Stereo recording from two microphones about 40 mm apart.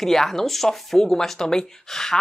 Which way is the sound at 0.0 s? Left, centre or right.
Centre.